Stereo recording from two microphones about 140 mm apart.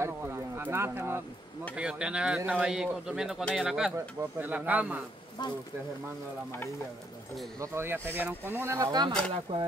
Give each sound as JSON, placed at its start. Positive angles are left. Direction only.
{"t": 0.0, "sound": "speech", "side_deg": -15}
{"t": 7.6, "sound": "speech", "side_deg": -20}
{"t": 9.3, "sound": "speech", "side_deg": -40}